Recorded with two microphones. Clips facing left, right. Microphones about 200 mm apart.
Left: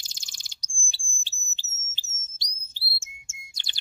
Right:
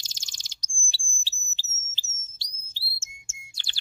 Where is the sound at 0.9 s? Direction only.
20° left (ahead or behind).